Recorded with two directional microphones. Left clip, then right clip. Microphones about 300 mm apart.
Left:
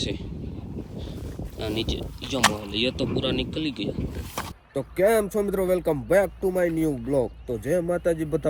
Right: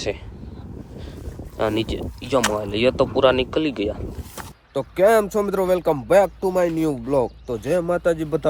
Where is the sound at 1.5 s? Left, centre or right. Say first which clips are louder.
Right 7 dB; centre.